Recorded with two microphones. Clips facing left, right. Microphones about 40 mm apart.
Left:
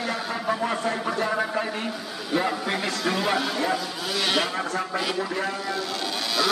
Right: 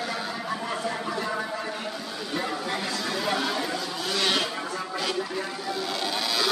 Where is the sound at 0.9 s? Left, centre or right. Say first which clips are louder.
Left 4 dB; left.